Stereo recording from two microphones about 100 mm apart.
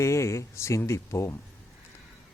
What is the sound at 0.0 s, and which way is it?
A man's voice, 30° left (ahead or behind).